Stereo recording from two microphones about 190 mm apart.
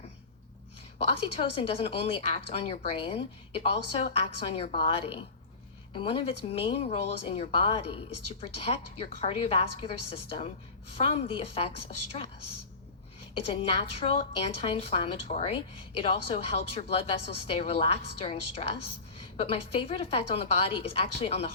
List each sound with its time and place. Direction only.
1.0 s a woman's voice: 30° left (ahead or behind)
13.4 s a woman's voice: 30° left (ahead or behind)